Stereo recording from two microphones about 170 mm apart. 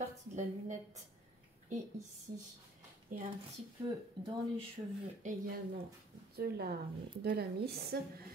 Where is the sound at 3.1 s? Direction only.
55° right (ahead or behind).